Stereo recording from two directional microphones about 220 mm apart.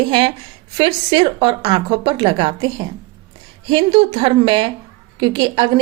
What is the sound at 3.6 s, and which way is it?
A woman's voice, 25° right (ahead or behind).